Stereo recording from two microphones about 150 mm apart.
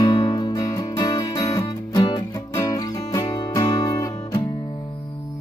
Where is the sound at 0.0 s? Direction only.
25° left (ahead or behind).